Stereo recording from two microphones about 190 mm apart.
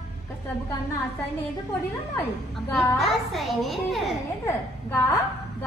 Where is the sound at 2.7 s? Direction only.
Centre (ahead or behind).